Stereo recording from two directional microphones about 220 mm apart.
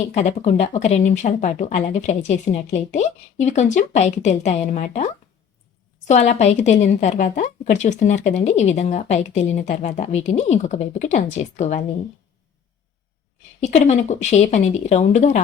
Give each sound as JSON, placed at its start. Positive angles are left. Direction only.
{"t": 0.1, "sound": "a woman's voice", "side_deg": 30}
{"t": 13.6, "sound": "a woman's voice", "side_deg": 30}